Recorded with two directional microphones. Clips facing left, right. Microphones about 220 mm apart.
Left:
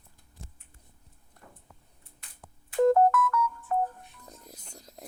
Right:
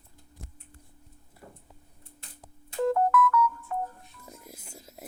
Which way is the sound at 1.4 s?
40° right (ahead or behind).